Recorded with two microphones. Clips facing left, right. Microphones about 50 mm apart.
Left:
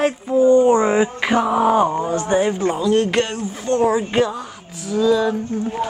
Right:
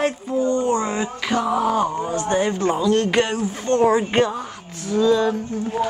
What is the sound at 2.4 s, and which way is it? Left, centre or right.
Speech, centre.